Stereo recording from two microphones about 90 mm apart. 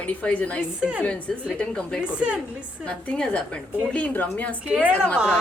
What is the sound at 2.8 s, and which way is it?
A woman's voice, 10° left (ahead or behind).